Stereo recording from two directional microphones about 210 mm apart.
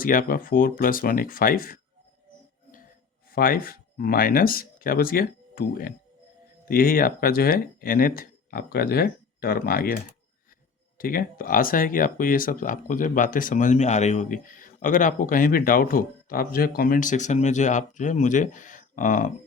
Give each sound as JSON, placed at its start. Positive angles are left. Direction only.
{"t": 0.0, "sound": "speech", "side_deg": 40}
{"t": 3.3, "sound": "speech", "side_deg": 45}